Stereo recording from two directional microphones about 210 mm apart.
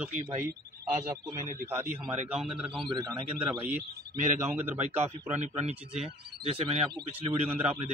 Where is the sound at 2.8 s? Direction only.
20° right (ahead or behind).